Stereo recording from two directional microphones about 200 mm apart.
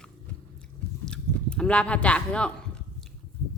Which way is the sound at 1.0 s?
5° left (ahead or behind).